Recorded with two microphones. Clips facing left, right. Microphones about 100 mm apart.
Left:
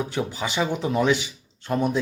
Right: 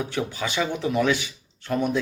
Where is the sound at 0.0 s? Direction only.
20° left (ahead or behind).